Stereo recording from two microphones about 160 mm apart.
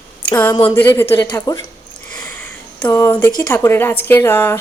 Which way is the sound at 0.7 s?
15° left (ahead or behind).